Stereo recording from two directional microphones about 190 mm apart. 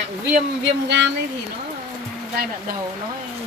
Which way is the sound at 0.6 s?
65° right (ahead or behind).